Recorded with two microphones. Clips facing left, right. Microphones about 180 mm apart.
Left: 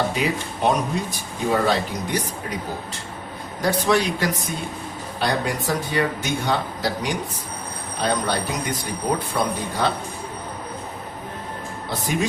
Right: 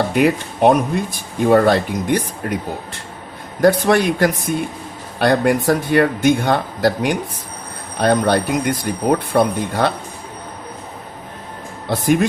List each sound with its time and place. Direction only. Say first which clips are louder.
0.1 s speech: right 8 dB; 60° right (ahead or behind)
3.6 s speech: right 7 dB; 55° right (ahead or behind)
11.9 s speech: right 10 dB; 60° right (ahead or behind)